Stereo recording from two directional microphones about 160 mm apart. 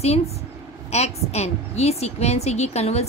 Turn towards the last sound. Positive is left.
turn(degrees=40)  # may be behind; listen again after turning